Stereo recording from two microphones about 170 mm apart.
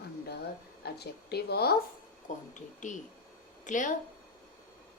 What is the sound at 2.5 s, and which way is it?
Speech, 45° left (ahead or behind).